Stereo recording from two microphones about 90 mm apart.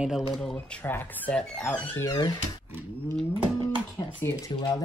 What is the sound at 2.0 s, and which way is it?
Speech, 45° left (ahead or behind).